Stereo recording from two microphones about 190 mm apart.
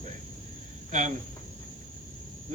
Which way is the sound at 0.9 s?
40° right (ahead or behind).